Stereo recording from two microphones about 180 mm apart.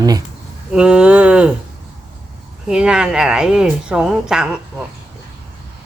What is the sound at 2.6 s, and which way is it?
Speech, 5° right (ahead or behind).